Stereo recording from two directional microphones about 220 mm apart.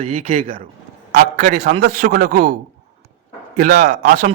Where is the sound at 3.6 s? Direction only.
35° right (ahead or behind).